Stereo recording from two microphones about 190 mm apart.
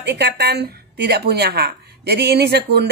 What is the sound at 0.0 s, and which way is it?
Speech, 60° right (ahead or behind).